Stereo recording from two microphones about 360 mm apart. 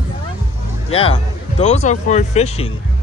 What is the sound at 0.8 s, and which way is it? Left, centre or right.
Speech, centre.